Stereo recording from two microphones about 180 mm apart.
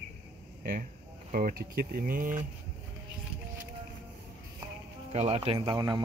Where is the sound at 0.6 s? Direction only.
60° right (ahead or behind).